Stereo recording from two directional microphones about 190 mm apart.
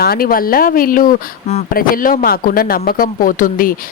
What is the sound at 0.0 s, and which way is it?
A woman's voice, 50° left (ahead or behind).